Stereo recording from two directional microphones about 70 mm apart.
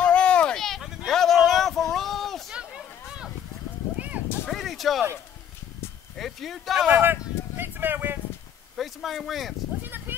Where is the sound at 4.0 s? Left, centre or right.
Right.